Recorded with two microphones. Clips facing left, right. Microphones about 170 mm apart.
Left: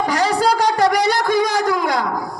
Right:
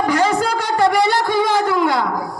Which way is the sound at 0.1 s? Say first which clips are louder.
Even; 35° left (ahead or behind).